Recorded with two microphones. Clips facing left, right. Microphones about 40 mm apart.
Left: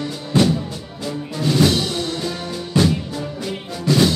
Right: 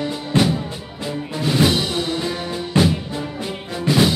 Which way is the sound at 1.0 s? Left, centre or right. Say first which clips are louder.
Even; centre.